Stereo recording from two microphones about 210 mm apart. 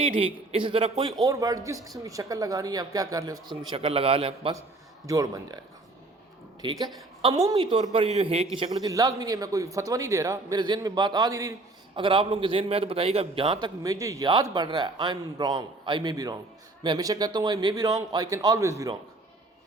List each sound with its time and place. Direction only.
0.0 s a man's voice: 25° right (ahead or behind)
3.7 s a man's voice: 25° right (ahead or behind)
6.6 s a woman's voice: 20° right (ahead or behind)